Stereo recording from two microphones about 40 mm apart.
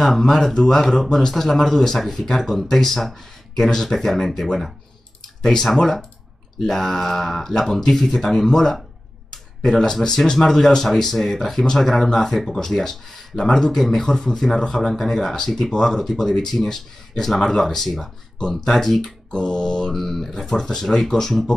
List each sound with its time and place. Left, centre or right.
0.0 s speech: centre
19.3 s mantra: centre
19.9 s speech: centre